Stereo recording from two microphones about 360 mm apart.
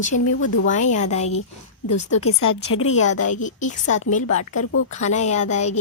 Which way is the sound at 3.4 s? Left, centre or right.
Centre.